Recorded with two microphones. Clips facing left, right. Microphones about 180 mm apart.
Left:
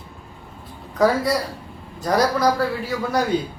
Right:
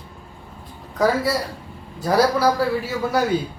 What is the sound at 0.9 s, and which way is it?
A man's voice, centre (ahead or behind).